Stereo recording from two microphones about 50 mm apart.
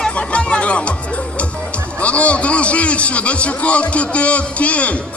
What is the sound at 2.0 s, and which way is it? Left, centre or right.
Speech, left.